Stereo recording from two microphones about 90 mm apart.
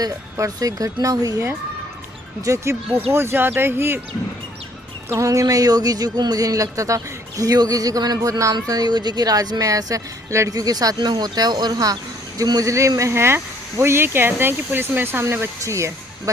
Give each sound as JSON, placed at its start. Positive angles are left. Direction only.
{"t": 0.0, "sound": "a woman's voice", "side_deg": -40}
{"t": 5.0, "sound": "a woman's voice", "side_deg": -35}